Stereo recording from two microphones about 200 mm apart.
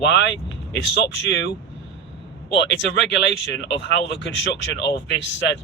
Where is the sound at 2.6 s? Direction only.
65° left (ahead or behind).